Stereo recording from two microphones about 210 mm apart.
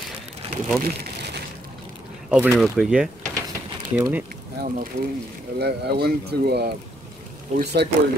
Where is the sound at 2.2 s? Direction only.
5° right (ahead or behind).